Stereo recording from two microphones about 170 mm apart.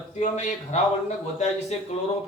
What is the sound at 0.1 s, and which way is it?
A man's voice, 45° left (ahead or behind).